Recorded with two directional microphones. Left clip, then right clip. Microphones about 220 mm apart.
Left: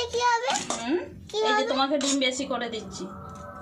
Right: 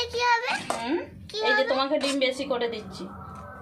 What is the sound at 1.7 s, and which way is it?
Speech, 30° right (ahead or behind).